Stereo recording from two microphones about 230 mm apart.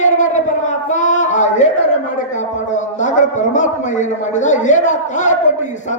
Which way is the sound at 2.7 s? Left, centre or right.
Left.